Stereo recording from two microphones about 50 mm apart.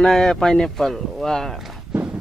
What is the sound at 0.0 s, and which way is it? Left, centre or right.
Speech, centre.